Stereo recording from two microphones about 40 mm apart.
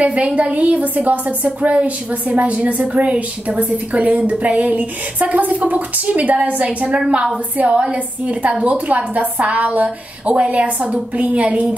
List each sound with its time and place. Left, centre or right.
0.0 s a woman's voice: right